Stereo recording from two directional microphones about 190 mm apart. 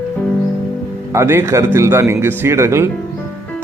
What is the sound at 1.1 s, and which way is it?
Speech, 15° right (ahead or behind).